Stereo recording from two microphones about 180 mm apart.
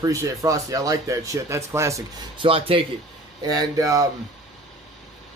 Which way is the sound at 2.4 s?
30° right (ahead or behind).